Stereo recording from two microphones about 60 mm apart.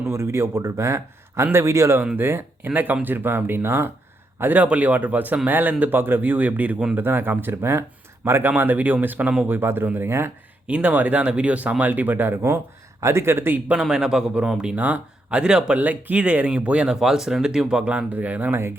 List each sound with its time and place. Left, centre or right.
0.1 s a man's voice: right
2.1 s speech: right
6.9 s speech: right
10.7 s speech: right
13.0 s a man's voice: right
13.8 s speech: centre
14.8 s speech: right
15.8 s speech: right
18.1 s speech: right